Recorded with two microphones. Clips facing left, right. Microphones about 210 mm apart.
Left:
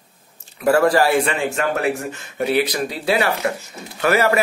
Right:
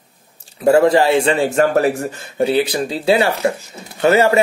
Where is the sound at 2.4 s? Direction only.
30° right (ahead or behind).